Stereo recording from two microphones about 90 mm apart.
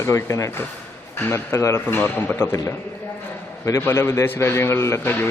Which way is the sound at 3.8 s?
30° left (ahead or behind).